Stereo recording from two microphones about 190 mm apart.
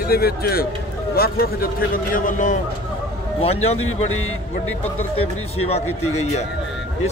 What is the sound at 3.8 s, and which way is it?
Speech, 90° left.